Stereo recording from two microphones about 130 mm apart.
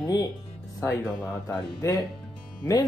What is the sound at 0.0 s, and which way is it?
Speech, 25° left (ahead or behind).